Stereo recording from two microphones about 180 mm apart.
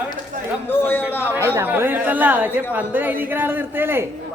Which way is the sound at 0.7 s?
10° left (ahead or behind).